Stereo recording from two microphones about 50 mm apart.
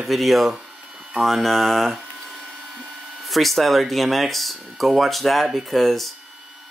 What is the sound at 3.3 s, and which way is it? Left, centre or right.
Speech, centre.